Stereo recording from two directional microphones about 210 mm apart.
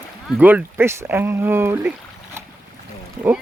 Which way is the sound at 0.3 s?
5° right (ahead or behind).